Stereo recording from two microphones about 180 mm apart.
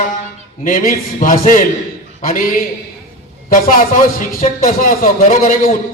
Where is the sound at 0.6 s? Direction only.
50° left (ahead or behind).